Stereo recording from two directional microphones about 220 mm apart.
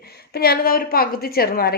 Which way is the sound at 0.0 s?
45° left (ahead or behind).